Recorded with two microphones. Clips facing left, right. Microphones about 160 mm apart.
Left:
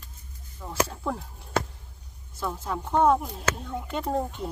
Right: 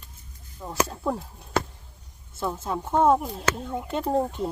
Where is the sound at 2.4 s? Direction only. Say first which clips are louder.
Right 2 dB; 20° right (ahead or behind).